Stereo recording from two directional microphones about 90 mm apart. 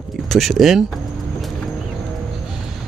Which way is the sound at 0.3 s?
Centre (ahead or behind).